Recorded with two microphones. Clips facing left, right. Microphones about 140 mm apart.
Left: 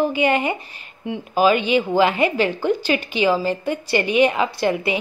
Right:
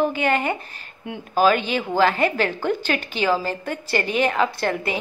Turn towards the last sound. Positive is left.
turn(degrees=5)  # may be behind; listen again after turning